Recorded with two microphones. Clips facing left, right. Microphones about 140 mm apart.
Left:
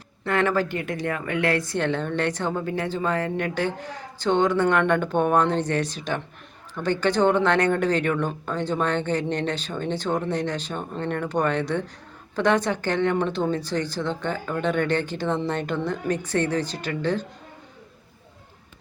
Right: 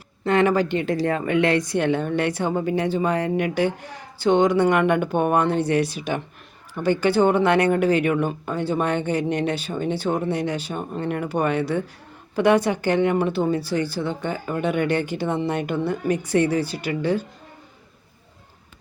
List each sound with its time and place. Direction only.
0.3 s speech: 20° right (ahead or behind)